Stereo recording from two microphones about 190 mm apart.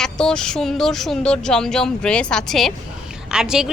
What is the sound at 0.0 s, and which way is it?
A woman's voice, 5° left (ahead or behind).